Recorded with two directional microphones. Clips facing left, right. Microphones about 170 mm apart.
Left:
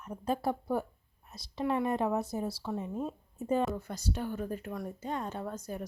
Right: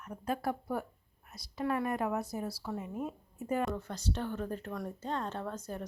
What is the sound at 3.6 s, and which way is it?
Speech, 10° left (ahead or behind).